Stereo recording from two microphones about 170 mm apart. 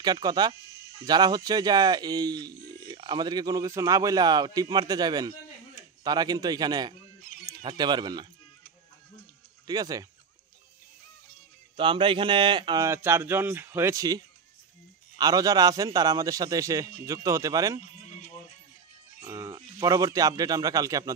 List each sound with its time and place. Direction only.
0.0 s speech: 25° right (ahead or behind)
9.7 s speech: 20° right (ahead or behind)
11.7 s speech: 30° right (ahead or behind)
18.0 s music: 45° left (ahead or behind)
19.1 s speech: 15° right (ahead or behind)